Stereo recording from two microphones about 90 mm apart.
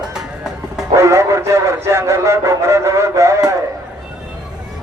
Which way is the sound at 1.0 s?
30° right (ahead or behind).